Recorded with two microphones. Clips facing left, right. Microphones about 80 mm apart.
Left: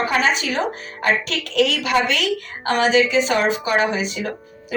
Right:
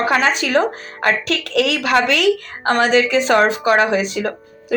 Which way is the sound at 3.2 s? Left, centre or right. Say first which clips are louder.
Right 5 dB; right.